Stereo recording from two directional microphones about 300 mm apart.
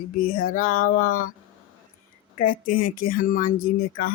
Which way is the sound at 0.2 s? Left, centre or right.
Left.